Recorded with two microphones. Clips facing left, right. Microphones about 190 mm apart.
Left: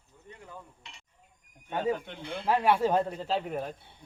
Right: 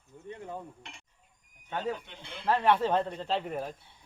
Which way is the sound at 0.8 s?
50° right (ahead or behind).